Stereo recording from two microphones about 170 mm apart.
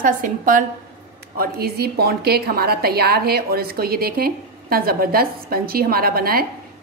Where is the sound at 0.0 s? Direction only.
50° right (ahead or behind).